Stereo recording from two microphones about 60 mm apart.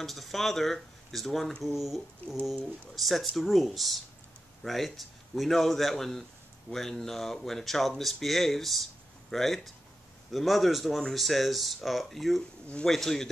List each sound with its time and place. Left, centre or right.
0.0 s a man's voice: centre